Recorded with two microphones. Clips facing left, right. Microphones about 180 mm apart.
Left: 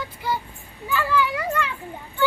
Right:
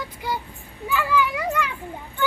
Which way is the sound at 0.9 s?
10° right (ahead or behind).